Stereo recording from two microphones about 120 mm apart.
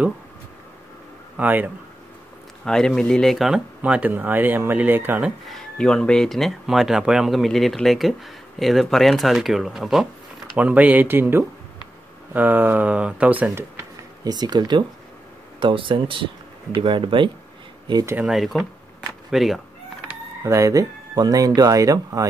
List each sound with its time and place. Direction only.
1.3 s speech: 15° right (ahead or behind)
2.6 s speech: 5° left (ahead or behind); by 5.3 s 15° right (ahead or behind)
5.5 s speech: 5° left (ahead or behind)
10.6 s speech: 15° right (ahead or behind)
13.7 s a sound: 35° right (ahead or behind)
15.6 s speech: 45° right (ahead or behind)
18.2 s speech: centre (ahead or behind)
20.4 s speech: 25° right (ahead or behind)